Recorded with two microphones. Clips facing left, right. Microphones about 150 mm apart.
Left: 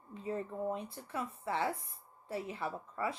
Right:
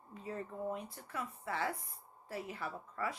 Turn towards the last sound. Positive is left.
turn(degrees=25)  # may be behind; listen again after turning